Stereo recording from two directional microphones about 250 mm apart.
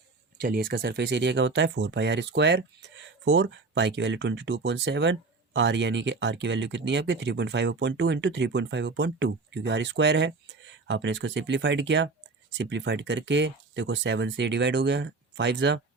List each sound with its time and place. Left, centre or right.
0.4 s speech: right